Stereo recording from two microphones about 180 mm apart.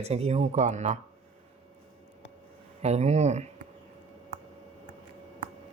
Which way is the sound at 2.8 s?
40° right (ahead or behind).